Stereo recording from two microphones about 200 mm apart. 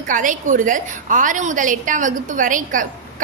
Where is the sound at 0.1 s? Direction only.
40° right (ahead or behind).